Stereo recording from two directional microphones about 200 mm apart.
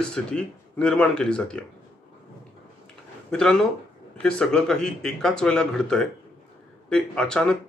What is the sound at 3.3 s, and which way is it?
Speech, 5° left (ahead or behind).